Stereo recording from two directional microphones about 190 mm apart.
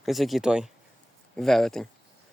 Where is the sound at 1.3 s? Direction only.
Centre (ahead or behind).